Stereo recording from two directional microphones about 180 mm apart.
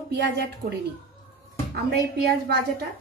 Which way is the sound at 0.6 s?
45° right (ahead or behind).